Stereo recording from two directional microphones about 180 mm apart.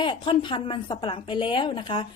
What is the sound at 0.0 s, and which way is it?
A woman's voice, 25° left (ahead or behind).